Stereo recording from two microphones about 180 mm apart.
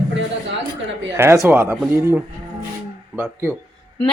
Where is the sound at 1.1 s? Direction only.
15° right (ahead or behind).